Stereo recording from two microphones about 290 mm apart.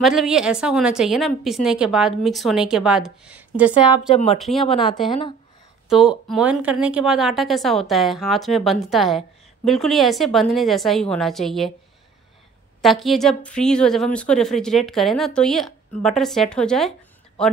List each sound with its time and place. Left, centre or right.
0.0 s a woman's voice: centre
4.1 s speech: centre
4.4 s a woman's voice: centre
5.9 s a woman's voice: centre
12.8 s a woman's voice: centre